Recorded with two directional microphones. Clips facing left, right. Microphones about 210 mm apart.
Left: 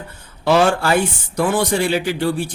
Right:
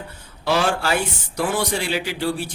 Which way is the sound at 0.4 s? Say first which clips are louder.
Left 6 dB; 50° left (ahead or behind).